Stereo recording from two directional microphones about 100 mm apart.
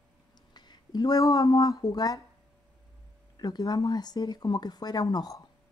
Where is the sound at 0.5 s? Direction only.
45° left (ahead or behind).